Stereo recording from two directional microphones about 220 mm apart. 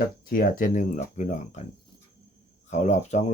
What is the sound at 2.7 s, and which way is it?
Speech, 30° left (ahead or behind).